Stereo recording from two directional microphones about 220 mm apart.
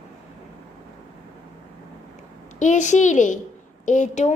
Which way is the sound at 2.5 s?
35° left (ahead or behind).